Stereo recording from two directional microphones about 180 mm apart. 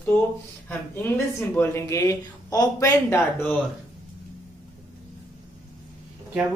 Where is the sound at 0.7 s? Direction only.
10° left (ahead or behind).